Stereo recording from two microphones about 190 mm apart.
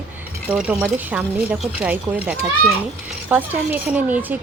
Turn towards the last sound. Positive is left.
turn(degrees=-10)  # may be behind; listen again after turning